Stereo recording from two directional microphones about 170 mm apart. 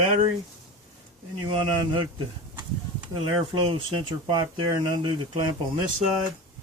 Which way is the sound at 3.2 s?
30° right (ahead or behind).